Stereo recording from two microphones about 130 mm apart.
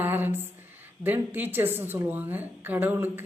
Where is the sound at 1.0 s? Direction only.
15° right (ahead or behind).